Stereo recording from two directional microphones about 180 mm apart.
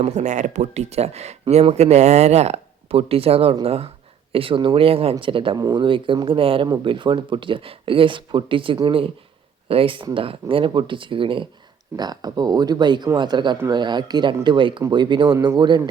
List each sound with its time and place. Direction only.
0.0 s speech: 40° right (ahead or behind); by 15.8 s 25° right (ahead or behind)